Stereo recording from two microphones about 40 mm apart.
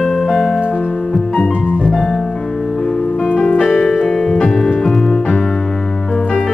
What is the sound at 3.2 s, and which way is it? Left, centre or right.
Music, left.